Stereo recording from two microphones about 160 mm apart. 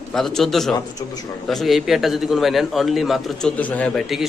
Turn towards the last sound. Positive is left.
turn(degrees=5)  # may be behind; listen again after turning